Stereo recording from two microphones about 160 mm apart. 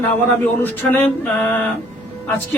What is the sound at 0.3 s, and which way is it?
Speech, 15° left (ahead or behind).